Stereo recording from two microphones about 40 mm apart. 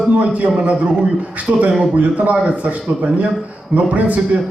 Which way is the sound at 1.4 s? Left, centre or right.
Right.